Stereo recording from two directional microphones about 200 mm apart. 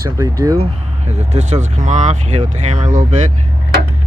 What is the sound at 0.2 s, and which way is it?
Speech, 15° right (ahead or behind).